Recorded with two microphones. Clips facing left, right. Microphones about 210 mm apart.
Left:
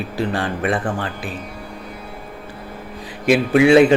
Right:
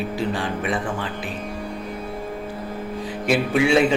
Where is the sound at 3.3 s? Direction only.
65° left (ahead or behind).